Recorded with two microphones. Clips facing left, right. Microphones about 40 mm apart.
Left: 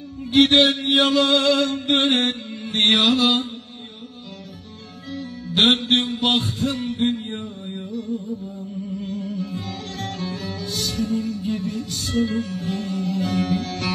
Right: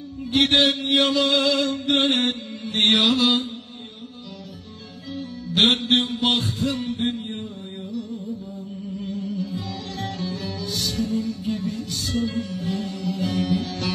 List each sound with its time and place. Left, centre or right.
0.3 s mantra: left
5.1 s music: left